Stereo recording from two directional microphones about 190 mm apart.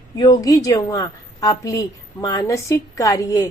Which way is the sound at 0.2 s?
20° left (ahead or behind).